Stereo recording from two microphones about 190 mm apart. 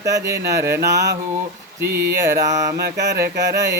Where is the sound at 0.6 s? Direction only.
15° right (ahead or behind).